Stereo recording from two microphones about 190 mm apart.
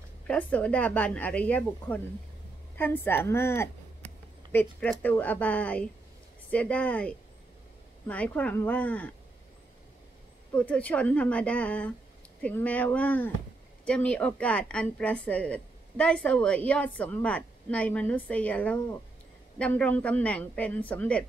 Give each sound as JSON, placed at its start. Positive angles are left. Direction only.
{"t": 0.3, "sound": "a woman's voice", "side_deg": 10}
{"t": 10.5, "sound": "a woman's voice", "side_deg": 10}